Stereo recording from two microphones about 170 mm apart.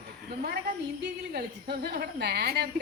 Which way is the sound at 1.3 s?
70° right (ahead or behind).